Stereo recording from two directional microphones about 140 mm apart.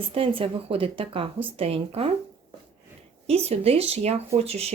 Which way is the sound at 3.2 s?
45° right (ahead or behind).